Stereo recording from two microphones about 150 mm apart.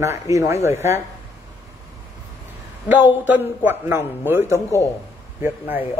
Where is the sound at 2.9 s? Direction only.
10° right (ahead or behind).